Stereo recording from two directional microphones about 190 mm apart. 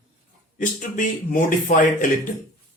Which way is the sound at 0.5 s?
45° left (ahead or behind).